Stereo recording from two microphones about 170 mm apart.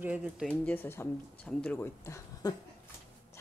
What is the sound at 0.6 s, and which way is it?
Speech, 10° left (ahead or behind).